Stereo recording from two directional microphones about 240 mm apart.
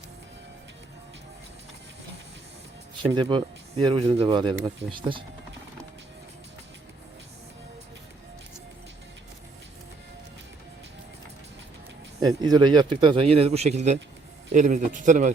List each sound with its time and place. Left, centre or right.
3.0 s a man's voice: centre
12.2 s a man's voice: centre; by 15.3 s right